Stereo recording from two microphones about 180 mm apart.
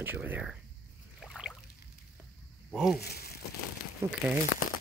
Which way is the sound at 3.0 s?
60° left (ahead or behind).